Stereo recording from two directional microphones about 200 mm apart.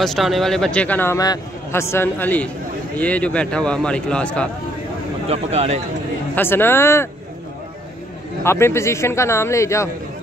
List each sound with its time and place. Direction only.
0.0 s a man's voice: centre (ahead or behind)
5.3 s speech: 30° right (ahead or behind)
6.3 s a man's voice: 10° left (ahead or behind)
8.5 s a man's voice: 15° left (ahead or behind)